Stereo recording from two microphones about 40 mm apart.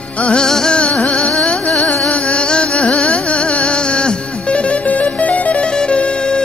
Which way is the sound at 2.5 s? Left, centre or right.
Left.